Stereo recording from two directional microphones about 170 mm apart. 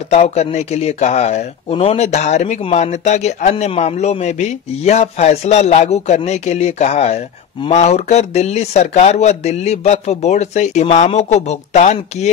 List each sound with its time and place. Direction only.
0.1 s speech: 40° left (ahead or behind)